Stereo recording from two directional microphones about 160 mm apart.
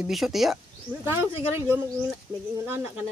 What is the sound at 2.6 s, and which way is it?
Speech, 15° right (ahead or behind).